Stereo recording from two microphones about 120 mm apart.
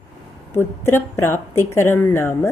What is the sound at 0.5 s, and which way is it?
A woman's voice, 20° left (ahead or behind).